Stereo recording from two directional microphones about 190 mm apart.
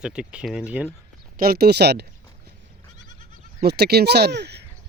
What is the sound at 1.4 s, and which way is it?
Speech, 55° right (ahead or behind).